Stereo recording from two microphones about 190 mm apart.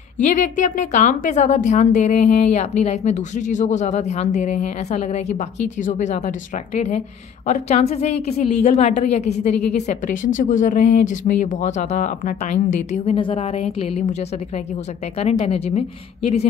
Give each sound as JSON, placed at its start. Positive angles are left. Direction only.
{"t": 0.2, "sound": "a woman's voice", "side_deg": 40}
{"t": 15.1, "sound": "a woman's voice", "side_deg": 35}